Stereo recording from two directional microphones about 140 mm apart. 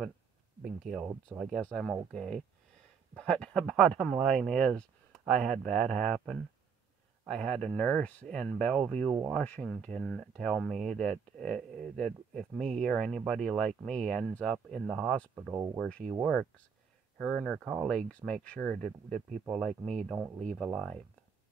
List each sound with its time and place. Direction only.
0.7 s speech: centre (ahead or behind)
15.5 s speech: 20° right (ahead or behind)
15.8 s speech: 5° left (ahead or behind)